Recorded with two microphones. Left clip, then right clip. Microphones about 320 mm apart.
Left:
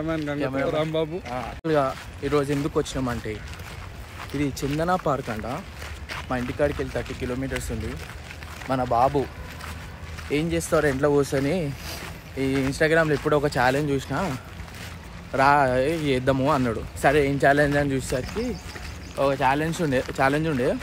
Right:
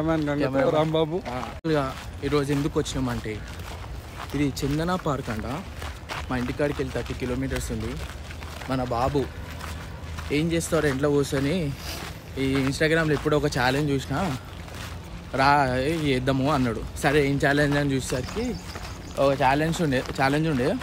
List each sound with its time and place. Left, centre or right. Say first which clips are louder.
0.0 s speech: right 2 dB; centre
1.3 s speech: left 2 dB; centre
4.4 s speech: left 1 dB; centre
8.7 s speech: left 3 dB; centre
9.2 s speech: left 1 dB; centre
10.3 s speech: left 2 dB; centre
15.3 s speech: left 2 dB; centre